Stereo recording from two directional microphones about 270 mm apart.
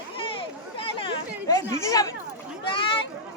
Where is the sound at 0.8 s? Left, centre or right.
Centre.